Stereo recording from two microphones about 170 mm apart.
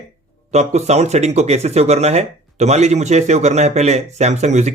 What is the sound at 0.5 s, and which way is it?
Speech, 40° right (ahead or behind).